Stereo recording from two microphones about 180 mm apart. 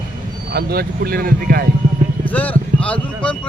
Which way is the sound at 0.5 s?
60° right (ahead or behind).